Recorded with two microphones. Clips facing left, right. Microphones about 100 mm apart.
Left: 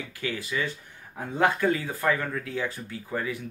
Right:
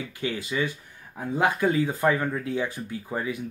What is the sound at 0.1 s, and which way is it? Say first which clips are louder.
Speech: right 1 dB; 20° right (ahead or behind).